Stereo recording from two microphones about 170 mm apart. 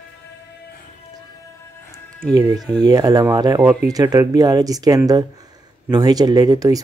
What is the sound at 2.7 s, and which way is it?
Speech, 20° right (ahead or behind).